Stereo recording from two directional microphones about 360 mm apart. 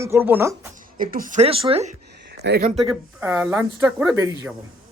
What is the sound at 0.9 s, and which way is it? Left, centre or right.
Speech, right.